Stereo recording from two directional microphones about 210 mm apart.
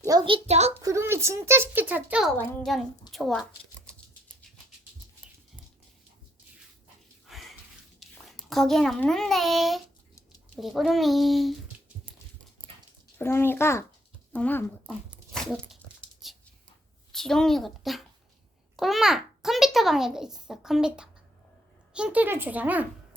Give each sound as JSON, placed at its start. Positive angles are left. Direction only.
{"t": 0.0, "sound": "a sound", "side_deg": -15}
{"t": 0.4, "sound": "a child's voice", "side_deg": -30}
{"t": 0.8, "sound": "a child's voice", "side_deg": -15}
{"t": 3.1, "sound": "a sound", "side_deg": 0}
{"t": 7.3, "sound": "a sound", "side_deg": 0}
{"t": 7.9, "sound": "a child's voice", "side_deg": 0}
{"t": 13.1, "sound": "a child's voice", "side_deg": 10}
{"t": 14.8, "sound": "dog", "side_deg": 0}
{"t": 17.1, "sound": "a child's voice", "side_deg": 0}